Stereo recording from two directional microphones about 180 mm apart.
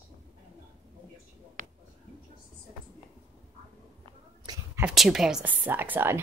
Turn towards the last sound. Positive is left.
turn(degrees=-10)  # may be behind; listen again after turning